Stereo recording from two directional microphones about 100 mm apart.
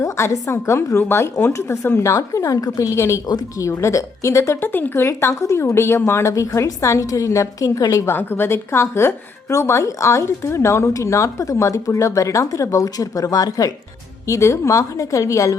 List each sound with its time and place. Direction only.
0.0 s a woman's voice: 30° left (ahead or behind)
3.2 s a woman's voice: 40° left (ahead or behind)
3.7 s a woman's voice: 30° left (ahead or behind)
8.1 s a woman's voice: 20° left (ahead or behind)